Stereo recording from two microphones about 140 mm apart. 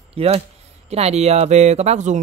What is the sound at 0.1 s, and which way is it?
Speech, 45° right (ahead or behind).